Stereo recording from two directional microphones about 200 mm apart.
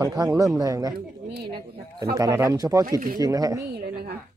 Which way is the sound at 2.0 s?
20° right (ahead or behind).